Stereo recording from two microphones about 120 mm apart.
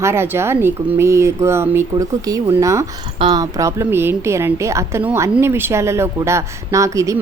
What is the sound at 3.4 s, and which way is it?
Speech, 25° right (ahead or behind).